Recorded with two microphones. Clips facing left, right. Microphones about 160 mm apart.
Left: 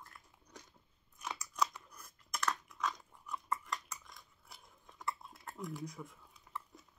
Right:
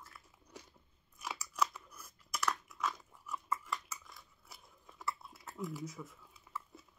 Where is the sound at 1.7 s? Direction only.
5° right (ahead or behind).